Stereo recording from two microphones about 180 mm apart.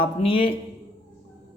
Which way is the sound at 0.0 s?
30° left (ahead or behind).